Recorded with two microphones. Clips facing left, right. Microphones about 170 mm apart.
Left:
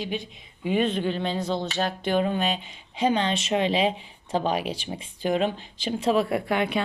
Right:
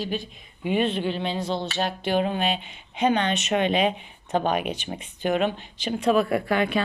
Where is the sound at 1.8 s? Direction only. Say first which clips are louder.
Even; 40° left (ahead or behind).